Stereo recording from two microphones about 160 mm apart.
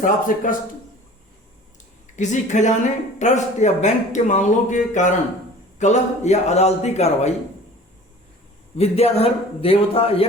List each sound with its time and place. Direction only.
0.0 s speech: 55° left (ahead or behind)
2.1 s speech: 50° left (ahead or behind)
8.7 s a man's voice: 40° left (ahead or behind)